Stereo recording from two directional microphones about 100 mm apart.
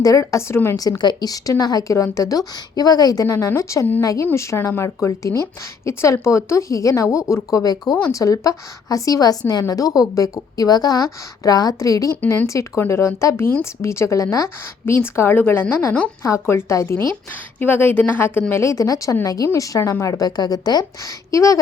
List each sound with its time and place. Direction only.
0.0 s a woman's voice: 35° left (ahead or behind)
0.8 s a woman's voice: 40° left (ahead or behind)
3.3 s a woman's voice: 25° left (ahead or behind)
12.1 s speech: 15° left (ahead or behind)
12.5 s a woman's voice: 30° left (ahead or behind)
16.2 s a woman's voice: 25° left (ahead or behind)